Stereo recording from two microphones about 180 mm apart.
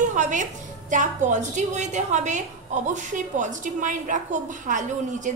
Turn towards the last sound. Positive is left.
turn(degrees=-45)  # may be behind; listen again after turning